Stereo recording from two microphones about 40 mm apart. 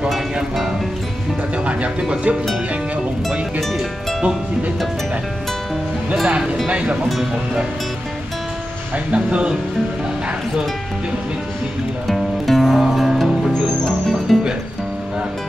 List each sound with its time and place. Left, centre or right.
1.6 s speech: right
6.2 s speech: right
8.9 s speech: right
12.1 s music: centre